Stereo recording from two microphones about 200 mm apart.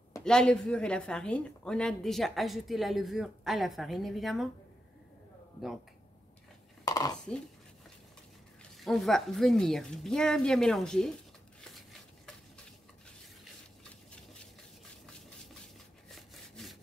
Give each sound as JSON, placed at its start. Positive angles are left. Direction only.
{"t": 0.2, "sound": "a woman's voice", "side_deg": 5}
{"t": 6.8, "sound": "a sound", "side_deg": 20}
{"t": 8.7, "sound": "a woman's voice", "side_deg": 0}
{"t": 15.6, "sound": "wood", "side_deg": 0}